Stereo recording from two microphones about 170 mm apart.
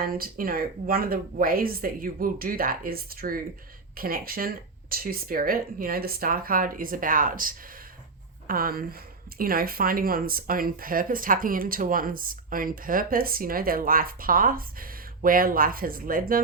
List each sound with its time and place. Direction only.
0.0 s speech: 60° right (ahead or behind)